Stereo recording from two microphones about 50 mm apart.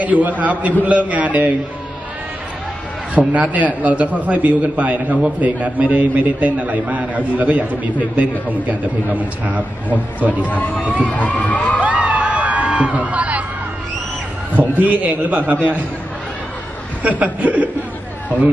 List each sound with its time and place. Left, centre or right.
0.0 s a man's voice: right
3.2 s a man's voice: right
10.4 s crowd: left
11.8 s a sound: right
14.6 s a man's voice: right
17.0 s a man's voice: right